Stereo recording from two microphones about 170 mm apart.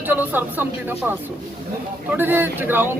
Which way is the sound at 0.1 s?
10° right (ahead or behind).